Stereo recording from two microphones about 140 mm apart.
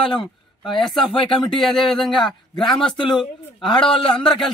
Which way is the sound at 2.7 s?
35° left (ahead or behind).